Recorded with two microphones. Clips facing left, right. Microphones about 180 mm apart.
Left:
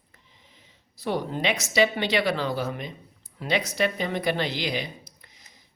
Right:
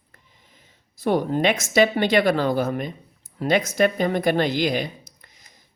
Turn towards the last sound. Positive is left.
turn(degrees=-45)  # may be behind; listen again after turning